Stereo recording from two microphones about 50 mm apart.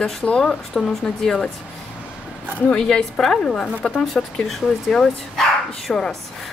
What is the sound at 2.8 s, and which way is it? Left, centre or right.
Speech, centre.